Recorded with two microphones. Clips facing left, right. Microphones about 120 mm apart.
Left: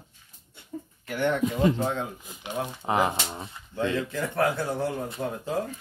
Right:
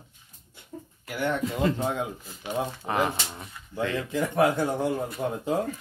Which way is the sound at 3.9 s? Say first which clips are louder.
Right 2 dB; 15° right (ahead or behind).